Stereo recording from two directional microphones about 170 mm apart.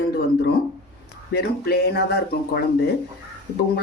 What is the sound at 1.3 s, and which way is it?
Speech, 70° left (ahead or behind).